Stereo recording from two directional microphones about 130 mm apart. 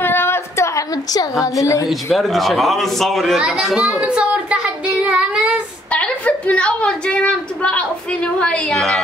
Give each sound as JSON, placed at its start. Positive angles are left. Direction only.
{"t": 0.0, "sound": "a sound", "side_deg": 15}
{"t": 1.4, "sound": "a woman's voice", "side_deg": 25}
{"t": 1.9, "sound": "speech", "side_deg": 0}
{"t": 3.8, "sound": "child singing", "side_deg": -10}
{"t": 5.9, "sound": "a woman's voice", "side_deg": 10}